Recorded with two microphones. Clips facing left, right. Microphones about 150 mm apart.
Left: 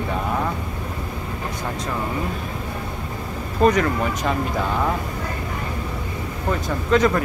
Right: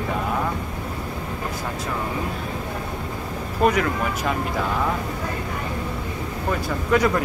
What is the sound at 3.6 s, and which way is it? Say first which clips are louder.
Speech: left 2 dB; 10° right (ahead or behind).